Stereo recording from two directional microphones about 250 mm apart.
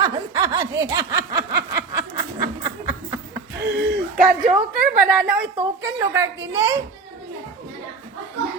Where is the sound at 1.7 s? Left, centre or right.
Centre.